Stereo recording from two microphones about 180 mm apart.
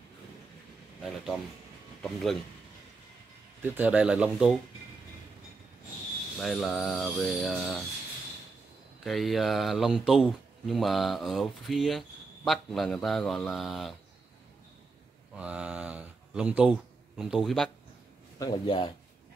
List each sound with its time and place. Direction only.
2.0 s speech: centre (ahead or behind)
3.7 s speech: 10° right (ahead or behind)
6.3 s speech: centre (ahead or behind)
9.0 s speech: centre (ahead or behind)
15.3 s a sound: 5° right (ahead or behind)
17.2 s speech: centre (ahead or behind)
18.4 s speech: 25° left (ahead or behind)